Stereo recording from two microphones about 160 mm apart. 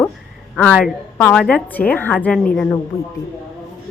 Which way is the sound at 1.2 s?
5° left (ahead or behind).